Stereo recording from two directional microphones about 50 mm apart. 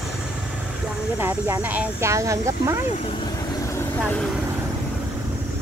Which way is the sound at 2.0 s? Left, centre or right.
Right.